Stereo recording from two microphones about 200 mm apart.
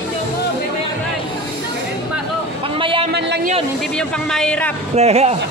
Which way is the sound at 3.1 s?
55° right (ahead or behind).